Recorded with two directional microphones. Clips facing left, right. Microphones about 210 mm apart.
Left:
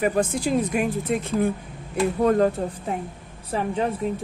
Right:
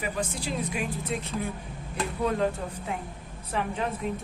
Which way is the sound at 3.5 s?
35° left (ahead or behind).